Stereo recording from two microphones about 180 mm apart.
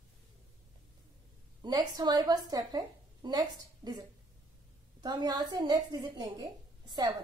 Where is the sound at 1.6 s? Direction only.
25° right (ahead or behind).